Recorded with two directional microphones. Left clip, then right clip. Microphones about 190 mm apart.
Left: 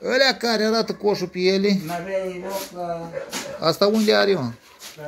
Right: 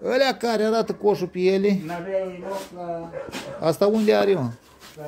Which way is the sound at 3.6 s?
10° right (ahead or behind).